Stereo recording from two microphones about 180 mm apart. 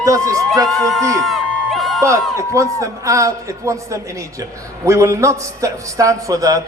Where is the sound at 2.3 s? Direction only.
15° right (ahead or behind).